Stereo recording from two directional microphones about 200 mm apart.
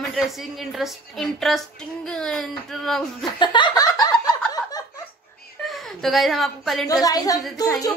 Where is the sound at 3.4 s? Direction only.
25° left (ahead or behind).